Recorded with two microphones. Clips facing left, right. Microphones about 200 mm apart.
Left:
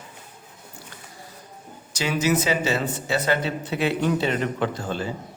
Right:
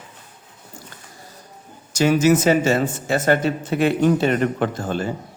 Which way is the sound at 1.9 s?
45° right (ahead or behind).